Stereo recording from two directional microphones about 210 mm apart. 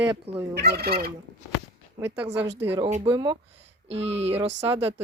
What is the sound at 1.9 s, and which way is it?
Speech, 10° right (ahead or behind).